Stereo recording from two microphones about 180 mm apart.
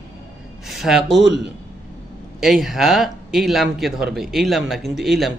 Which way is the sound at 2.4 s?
Centre (ahead or behind).